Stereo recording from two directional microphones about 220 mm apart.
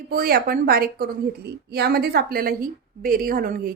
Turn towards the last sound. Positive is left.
turn(degrees=-40)  # may be behind; listen again after turning